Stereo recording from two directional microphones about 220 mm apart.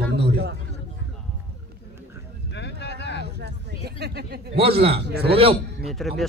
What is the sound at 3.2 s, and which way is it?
A man's voice, 50° right (ahead or behind).